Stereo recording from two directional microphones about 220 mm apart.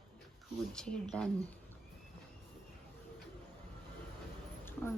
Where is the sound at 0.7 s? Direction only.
Centre (ahead or behind).